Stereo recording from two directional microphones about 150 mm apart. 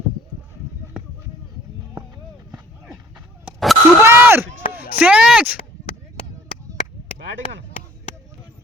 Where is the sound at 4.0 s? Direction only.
15° right (ahead or behind).